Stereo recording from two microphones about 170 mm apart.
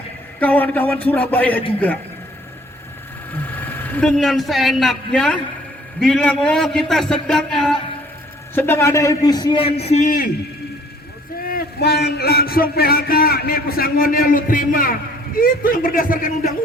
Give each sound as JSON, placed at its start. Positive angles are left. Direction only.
{"t": 0.3, "sound": "a man's voice", "side_deg": 10}
{"t": 3.5, "sound": "a man's voice", "side_deg": 10}
{"t": 8.5, "sound": "a man's voice", "side_deg": 15}
{"t": 11.4, "sound": "a sound", "side_deg": 65}